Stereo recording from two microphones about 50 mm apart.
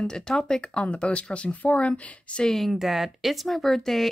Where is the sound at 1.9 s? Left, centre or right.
Centre.